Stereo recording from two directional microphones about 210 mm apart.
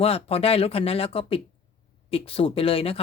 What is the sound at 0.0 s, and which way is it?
Speech, 30° left (ahead or behind).